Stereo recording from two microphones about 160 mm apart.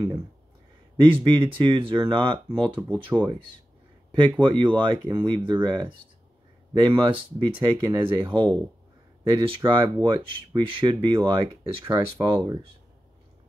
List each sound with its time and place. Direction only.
1.0 s speech: 30° right (ahead or behind)
3.1 s speech: 5° right (ahead or behind)
4.1 s speech: 30° right (ahead or behind)